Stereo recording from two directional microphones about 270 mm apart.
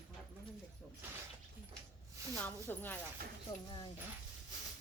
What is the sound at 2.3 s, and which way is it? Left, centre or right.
Speech, centre.